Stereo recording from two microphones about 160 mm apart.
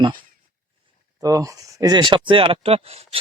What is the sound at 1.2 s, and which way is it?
Speech, 20° right (ahead or behind).